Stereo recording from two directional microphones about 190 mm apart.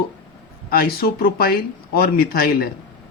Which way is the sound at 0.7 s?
55° left (ahead or behind).